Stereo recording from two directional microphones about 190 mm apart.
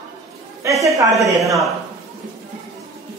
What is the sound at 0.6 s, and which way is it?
Speech, 15° right (ahead or behind).